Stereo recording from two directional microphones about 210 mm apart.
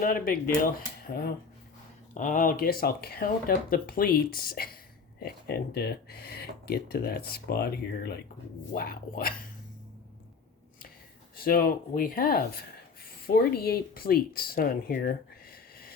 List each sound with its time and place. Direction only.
0.0 s speech: 40° left (ahead or behind)
11.3 s speech: 45° left (ahead or behind)